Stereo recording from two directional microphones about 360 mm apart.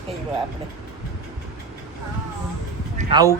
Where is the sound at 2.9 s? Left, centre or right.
Centre.